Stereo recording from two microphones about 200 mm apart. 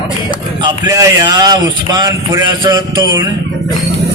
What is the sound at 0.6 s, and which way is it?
A man's voice, 20° right (ahead or behind).